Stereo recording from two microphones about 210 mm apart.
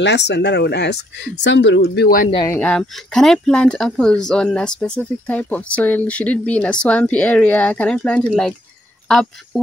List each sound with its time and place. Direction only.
0.0 s speech: 55° left (ahead or behind)
2.3 s speech: 15° left (ahead or behind)
2.6 s speech: 5° left (ahead or behind)